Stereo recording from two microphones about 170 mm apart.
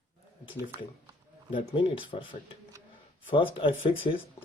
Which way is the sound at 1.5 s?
30° left (ahead or behind).